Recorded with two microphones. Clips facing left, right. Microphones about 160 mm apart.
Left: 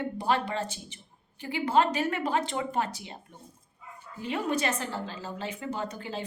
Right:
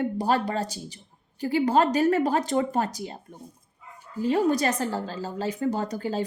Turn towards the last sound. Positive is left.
turn(degrees=-40)  # may be behind; listen again after turning